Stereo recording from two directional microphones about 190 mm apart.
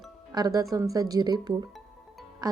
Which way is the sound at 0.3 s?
20° right (ahead or behind).